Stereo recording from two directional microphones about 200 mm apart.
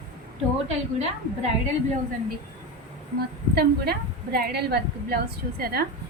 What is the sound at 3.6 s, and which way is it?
A woman's voice, 50° right (ahead or behind).